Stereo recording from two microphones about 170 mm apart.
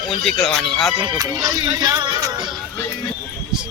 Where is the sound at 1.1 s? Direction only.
20° right (ahead or behind).